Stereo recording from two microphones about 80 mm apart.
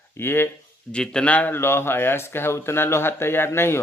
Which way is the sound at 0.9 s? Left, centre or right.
Centre.